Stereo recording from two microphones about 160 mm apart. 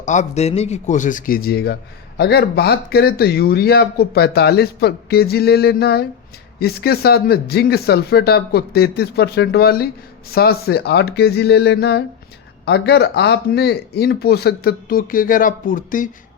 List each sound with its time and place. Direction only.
0.0 s a man's voice: 50° left (ahead or behind); by 1.7 s 75° left (ahead or behind)
2.1 s speech: 85° left; by 16.0 s 60° left (ahead or behind)